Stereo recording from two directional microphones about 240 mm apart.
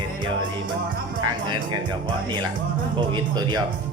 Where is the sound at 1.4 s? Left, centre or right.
Centre.